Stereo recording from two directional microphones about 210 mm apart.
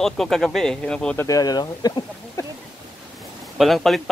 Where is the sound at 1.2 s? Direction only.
15° left (ahead or behind).